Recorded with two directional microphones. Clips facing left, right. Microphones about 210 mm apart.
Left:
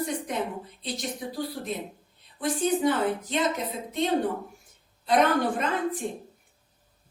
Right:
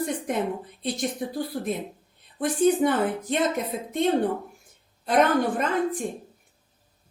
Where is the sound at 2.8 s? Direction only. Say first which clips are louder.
Right 1 dB; 55° right (ahead or behind).